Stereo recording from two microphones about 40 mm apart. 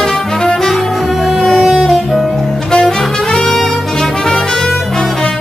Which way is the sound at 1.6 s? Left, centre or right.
Centre.